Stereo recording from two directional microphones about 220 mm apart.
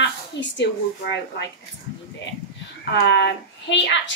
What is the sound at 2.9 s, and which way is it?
Speech, 50° left (ahead or behind).